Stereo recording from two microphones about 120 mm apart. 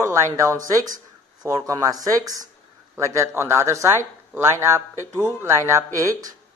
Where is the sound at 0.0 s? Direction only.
25° right (ahead or behind).